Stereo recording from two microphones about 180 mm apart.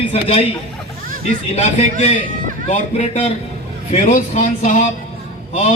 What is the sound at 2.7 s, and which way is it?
Speech, 35° left (ahead or behind).